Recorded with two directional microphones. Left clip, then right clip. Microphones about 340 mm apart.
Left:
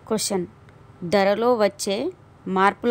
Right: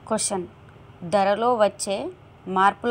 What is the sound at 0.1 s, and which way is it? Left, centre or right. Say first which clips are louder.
A woman's voice: left 1 dB; centre.